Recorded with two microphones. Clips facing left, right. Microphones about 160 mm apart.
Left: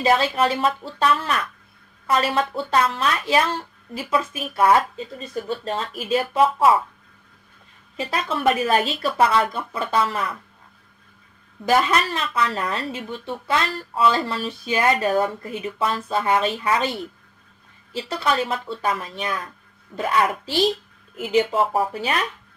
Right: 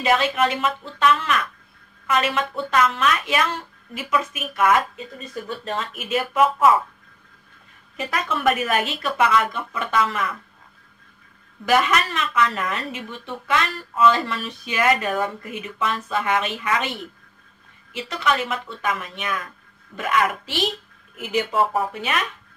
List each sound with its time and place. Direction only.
0.0 s speech: 30° left (ahead or behind)
8.0 s speech: 30° left (ahead or behind)
11.6 s speech: 30° left (ahead or behind)